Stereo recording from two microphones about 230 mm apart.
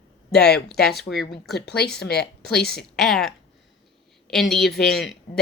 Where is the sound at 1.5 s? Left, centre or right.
Left.